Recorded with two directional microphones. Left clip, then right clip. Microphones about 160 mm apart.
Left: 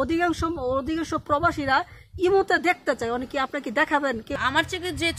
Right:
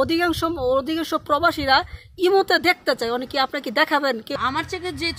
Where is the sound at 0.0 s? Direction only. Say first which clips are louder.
Right 3 dB; 25° right (ahead or behind).